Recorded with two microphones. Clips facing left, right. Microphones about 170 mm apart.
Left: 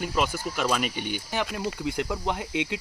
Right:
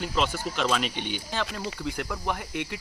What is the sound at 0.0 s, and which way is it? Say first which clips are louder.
Speech: left 1 dB; 10° left (ahead or behind).